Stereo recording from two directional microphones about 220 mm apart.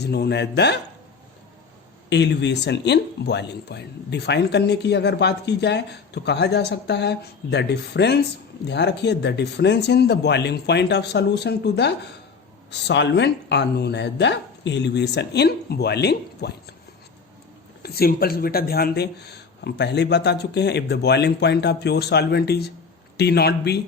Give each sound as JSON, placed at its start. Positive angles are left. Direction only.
{"t": 0.0, "sound": "speech", "side_deg": 50}
{"t": 2.0, "sound": "speech", "side_deg": 50}
{"t": 17.8, "sound": "speech", "side_deg": 45}